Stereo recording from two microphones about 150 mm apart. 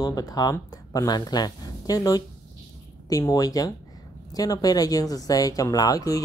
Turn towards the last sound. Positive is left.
turn(degrees=25)  # may be behind; listen again after turning